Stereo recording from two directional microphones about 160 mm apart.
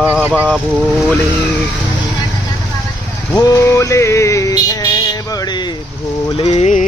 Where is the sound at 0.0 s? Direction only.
10° right (ahead or behind).